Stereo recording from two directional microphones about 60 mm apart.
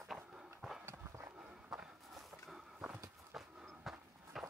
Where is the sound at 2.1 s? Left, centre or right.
Centre.